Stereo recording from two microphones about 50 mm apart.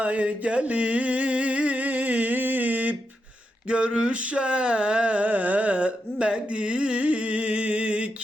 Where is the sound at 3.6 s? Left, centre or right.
Right.